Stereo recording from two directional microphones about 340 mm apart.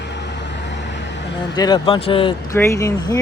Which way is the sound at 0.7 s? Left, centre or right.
Left.